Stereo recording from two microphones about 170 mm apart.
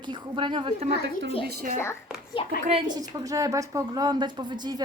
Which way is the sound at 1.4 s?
55° right (ahead or behind).